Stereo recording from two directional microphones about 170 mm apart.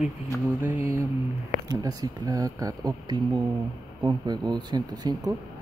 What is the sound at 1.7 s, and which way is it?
Speech, 20° right (ahead or behind).